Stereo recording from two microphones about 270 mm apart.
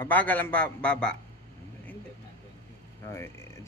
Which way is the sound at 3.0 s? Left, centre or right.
Centre.